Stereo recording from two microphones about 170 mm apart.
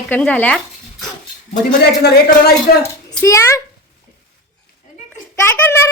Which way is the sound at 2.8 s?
15° left (ahead or behind).